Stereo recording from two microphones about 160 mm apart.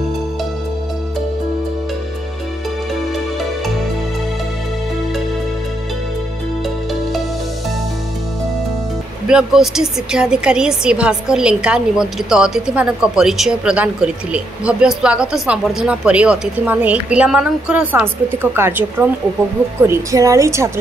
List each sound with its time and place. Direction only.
9.3 s a woman's voice: 5° right (ahead or behind)